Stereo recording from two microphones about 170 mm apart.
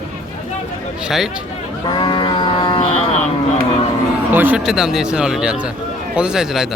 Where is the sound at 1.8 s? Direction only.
25° left (ahead or behind).